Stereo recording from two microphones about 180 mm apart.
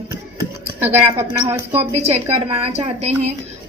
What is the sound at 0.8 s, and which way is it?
A woman's voice, 15° right (ahead or behind).